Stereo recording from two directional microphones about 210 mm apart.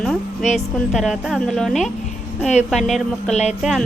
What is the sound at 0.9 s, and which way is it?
Speech, centre (ahead or behind).